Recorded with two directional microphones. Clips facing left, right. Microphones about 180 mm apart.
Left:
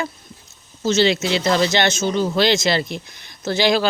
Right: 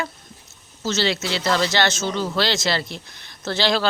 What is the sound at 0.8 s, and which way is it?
Speech, 20° left (ahead or behind).